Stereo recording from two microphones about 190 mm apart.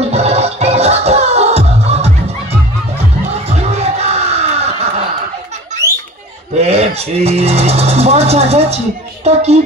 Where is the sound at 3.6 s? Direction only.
35° right (ahead or behind).